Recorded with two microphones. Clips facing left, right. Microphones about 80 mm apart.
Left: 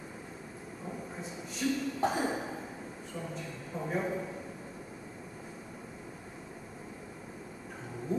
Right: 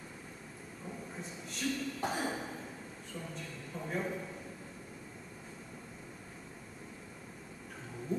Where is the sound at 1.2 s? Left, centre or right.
Centre.